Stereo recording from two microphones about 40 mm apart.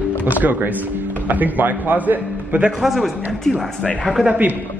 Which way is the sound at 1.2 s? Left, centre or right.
Right.